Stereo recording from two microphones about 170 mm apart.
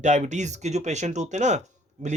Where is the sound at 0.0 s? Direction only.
45° right (ahead or behind).